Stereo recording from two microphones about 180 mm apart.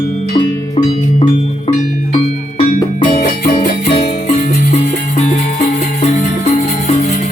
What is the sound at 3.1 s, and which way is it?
Music, 40° left (ahead or behind).